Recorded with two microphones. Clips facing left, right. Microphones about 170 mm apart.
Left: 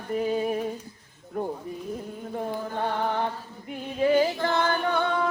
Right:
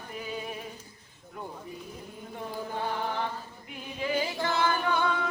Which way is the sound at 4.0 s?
45° left (ahead or behind).